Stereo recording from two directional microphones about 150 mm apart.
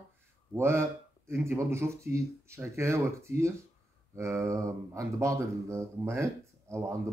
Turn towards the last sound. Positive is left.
turn(degrees=-20)  # may be behind; listen again after turning